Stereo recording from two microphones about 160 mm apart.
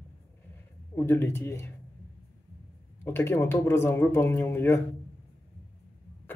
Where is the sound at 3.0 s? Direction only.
15° left (ahead or behind).